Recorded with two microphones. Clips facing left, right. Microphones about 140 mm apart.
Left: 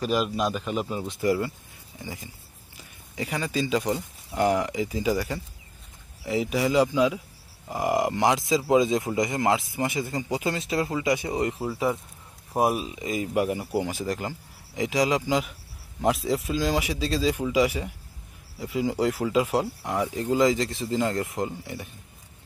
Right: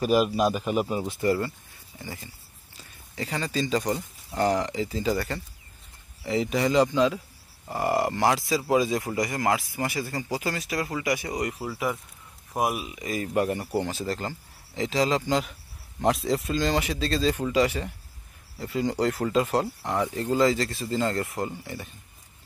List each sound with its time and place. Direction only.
0.0 s speech: 5° right (ahead or behind)
1.2 s a man's voice: 10° left (ahead or behind)
12.5 s a man's voice: 30° left (ahead or behind)
13.3 s speech: 5° left (ahead or behind)